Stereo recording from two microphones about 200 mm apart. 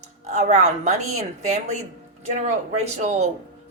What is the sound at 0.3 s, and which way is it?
Speech, 35° right (ahead or behind).